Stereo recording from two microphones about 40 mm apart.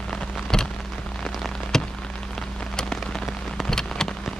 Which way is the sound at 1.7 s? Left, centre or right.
Centre.